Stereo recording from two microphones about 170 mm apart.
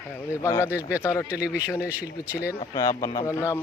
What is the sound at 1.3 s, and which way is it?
Speech, 10° right (ahead or behind).